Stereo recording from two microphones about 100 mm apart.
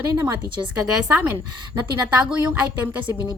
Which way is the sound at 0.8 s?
10° right (ahead or behind).